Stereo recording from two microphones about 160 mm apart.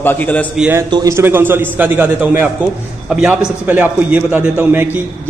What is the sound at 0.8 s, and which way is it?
Speech, 25° right (ahead or behind).